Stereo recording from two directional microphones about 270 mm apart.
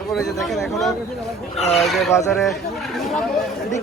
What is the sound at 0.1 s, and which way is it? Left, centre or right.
Speech, centre.